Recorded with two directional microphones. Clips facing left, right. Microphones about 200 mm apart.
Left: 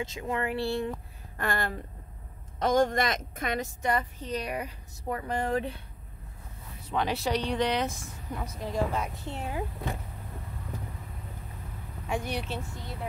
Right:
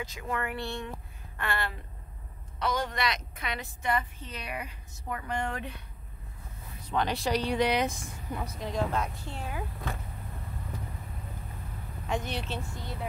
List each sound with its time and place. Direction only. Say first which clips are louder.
0.0 s speech: left 3 dB; 25° left (ahead or behind)
1.4 s a woman's voice: left 3 dB; 45° left (ahead or behind)
6.9 s speech: even; 5° left (ahead or behind)
8.4 s speech: left 1 dB; 10° left (ahead or behind)
9.2 s speech: left 3 dB; 20° left (ahead or behind)
12.1 s speech: left 1 dB; 10° left (ahead or behind)